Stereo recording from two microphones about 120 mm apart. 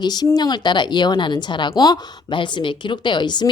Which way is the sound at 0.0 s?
35° left (ahead or behind).